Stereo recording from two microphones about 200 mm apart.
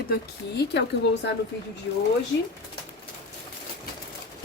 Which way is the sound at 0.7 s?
60° left (ahead or behind).